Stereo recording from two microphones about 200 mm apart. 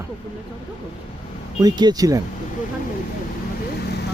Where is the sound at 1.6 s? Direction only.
20° right (ahead or behind).